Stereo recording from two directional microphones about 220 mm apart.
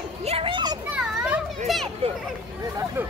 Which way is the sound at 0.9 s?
5° right (ahead or behind).